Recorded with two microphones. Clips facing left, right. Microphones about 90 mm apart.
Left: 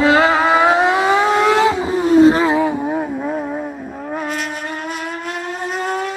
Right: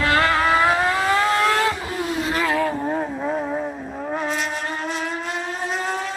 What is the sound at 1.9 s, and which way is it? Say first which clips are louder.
Vehicle: left 13 dB; 35° left (ahead or behind).